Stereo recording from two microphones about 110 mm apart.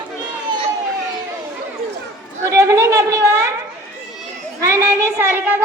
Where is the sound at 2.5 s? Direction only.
30° right (ahead or behind).